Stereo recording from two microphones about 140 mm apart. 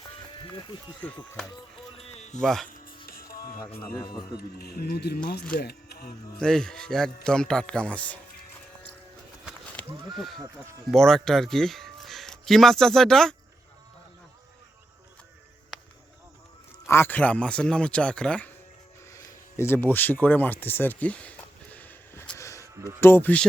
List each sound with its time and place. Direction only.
0.0 s music: 35° left (ahead or behind)
1.0 s a man's voice: 10° left (ahead or behind)
2.0 s a sound: 50° left (ahead or behind)
2.4 s speech: centre (ahead or behind)
3.1 s music: 90° left
4.4 s speech: 90° left
6.4 s speech: 5° left (ahead or behind)
10.2 s speech: centre (ahead or behind)
16.8 s a man's voice: 20° left (ahead or behind)
19.1 s a sound: 20° left (ahead or behind)
22.6 s a sound: 20° right (ahead or behind)
23.0 s a man's voice: 15° left (ahead or behind)